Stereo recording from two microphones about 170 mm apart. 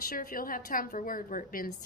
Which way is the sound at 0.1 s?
55° left (ahead or behind).